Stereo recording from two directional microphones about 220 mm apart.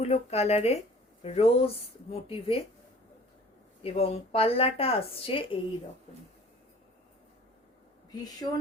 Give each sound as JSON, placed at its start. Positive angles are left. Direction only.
{"t": 0.0, "sound": "a woman's voice", "side_deg": 30}
{"t": 3.8, "sound": "a woman's voice", "side_deg": 25}
{"t": 8.1, "sound": "speech", "side_deg": 15}